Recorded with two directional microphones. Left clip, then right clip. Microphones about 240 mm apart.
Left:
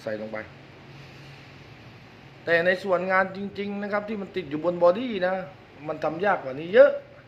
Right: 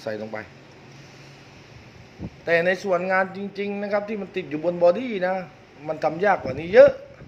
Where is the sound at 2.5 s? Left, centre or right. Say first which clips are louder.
Right 1 dB; centre.